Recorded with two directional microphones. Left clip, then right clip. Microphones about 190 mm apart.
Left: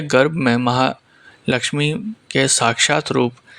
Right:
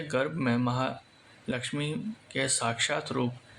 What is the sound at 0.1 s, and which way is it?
Speech, 45° left (ahead or behind).